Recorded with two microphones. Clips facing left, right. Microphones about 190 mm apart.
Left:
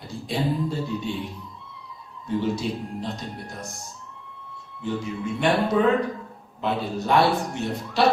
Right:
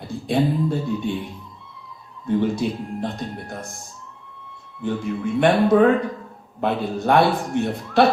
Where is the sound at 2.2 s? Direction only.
55° right (ahead or behind).